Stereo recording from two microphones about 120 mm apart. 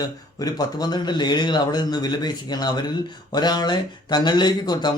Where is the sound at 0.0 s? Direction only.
35° left (ahead or behind).